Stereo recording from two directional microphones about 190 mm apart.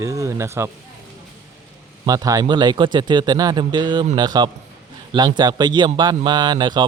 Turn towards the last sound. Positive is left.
turn(degrees=-25)  # may be behind; listen again after turning